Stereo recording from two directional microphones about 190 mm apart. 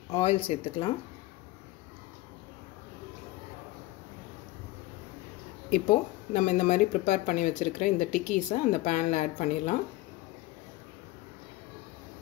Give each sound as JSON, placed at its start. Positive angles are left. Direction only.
{"t": 0.1, "sound": "speech", "side_deg": 30}
{"t": 5.7, "sound": "speech", "side_deg": 40}